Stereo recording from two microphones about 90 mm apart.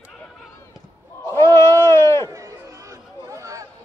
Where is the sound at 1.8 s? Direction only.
30° left (ahead or behind).